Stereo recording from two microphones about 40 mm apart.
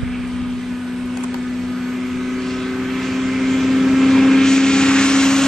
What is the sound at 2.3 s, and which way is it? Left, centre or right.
Vehicle, centre.